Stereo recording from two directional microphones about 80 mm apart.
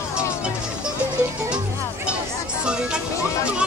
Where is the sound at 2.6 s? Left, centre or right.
Centre.